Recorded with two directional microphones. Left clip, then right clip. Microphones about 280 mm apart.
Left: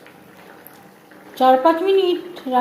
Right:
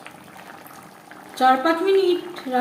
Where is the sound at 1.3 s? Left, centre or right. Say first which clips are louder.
Left 4 dB; centre.